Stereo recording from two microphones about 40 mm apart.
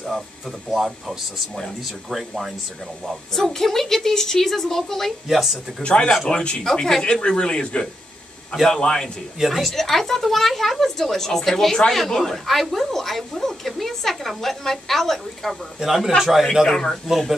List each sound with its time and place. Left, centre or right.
0.7 s speech: centre
5.3 s speech: centre
5.8 s speech: left
6.6 s speech: centre
7.1 s speech: left
9.4 s speech: centre
9.7 s speech: centre
15.8 s a man's voice: centre
16.6 s speech: centre